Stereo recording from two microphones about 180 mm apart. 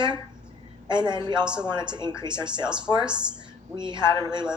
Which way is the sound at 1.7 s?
25° right (ahead or behind).